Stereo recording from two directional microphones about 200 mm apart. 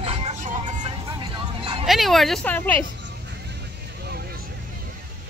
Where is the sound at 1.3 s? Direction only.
30° right (ahead or behind).